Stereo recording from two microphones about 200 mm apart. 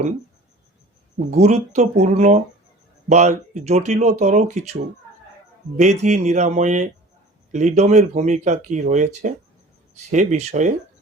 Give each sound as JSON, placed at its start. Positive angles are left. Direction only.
{"t": 1.3, "sound": "speech", "side_deg": -35}
{"t": 5.7, "sound": "speech", "side_deg": -35}